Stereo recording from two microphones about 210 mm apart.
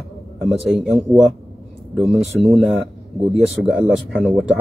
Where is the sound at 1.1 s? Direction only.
Centre (ahead or behind).